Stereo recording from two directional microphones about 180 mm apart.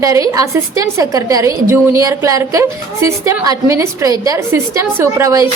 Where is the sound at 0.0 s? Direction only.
20° right (ahead or behind).